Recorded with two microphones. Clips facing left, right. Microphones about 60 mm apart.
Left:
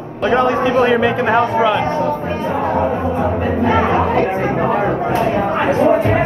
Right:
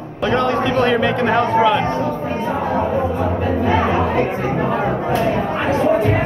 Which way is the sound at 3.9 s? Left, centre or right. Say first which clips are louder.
Left 3 dB; left.